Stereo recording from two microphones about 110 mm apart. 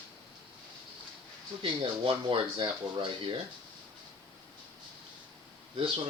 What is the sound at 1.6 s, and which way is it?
Speech, 55° right (ahead or behind).